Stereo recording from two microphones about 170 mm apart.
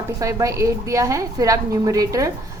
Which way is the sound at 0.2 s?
20° right (ahead or behind).